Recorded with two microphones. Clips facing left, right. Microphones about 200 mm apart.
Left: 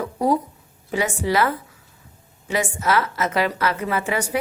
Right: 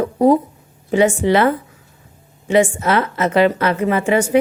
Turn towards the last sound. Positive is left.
turn(degrees=-25)  # may be behind; listen again after turning